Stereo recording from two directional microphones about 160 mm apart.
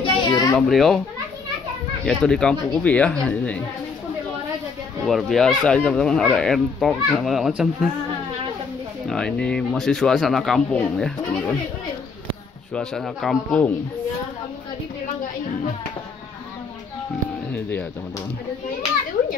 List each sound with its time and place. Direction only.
0.0 s children playing: 25° left (ahead or behind)
0.6 s speech: centre (ahead or behind)
2.0 s speech: 5° left (ahead or behind)
5.0 s speech: centre (ahead or behind)
9.0 s speech: 5° left (ahead or behind)
12.7 s speech: 5° left (ahead or behind)